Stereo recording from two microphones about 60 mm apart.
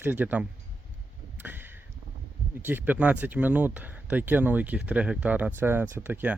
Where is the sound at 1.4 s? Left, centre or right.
Right.